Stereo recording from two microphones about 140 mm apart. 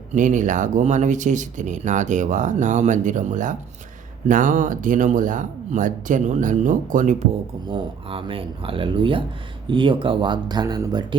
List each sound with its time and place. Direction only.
0.1 s speech: 65° right (ahead or behind)
7.7 s speech: 40° right (ahead or behind)